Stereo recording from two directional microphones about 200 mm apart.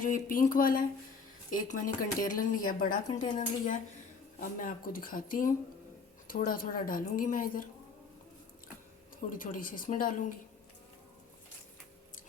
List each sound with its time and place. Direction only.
0.0 s a woman's voice: 45° left (ahead or behind)
9.3 s a woman's voice: 45° left (ahead or behind)